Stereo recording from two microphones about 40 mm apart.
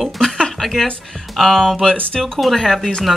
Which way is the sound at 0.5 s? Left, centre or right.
Centre.